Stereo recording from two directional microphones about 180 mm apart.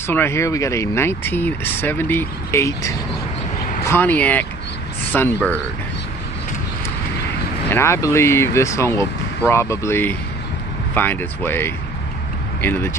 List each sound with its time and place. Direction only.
0.1 s speech: 15° left (ahead or behind)
7.7 s speech: 15° left (ahead or behind)